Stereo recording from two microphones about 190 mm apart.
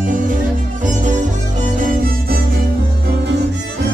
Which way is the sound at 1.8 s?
50° right (ahead or behind).